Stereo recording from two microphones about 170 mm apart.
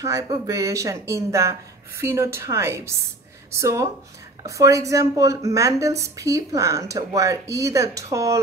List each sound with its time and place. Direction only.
0.0 s a woman's voice: 20° right (ahead or behind)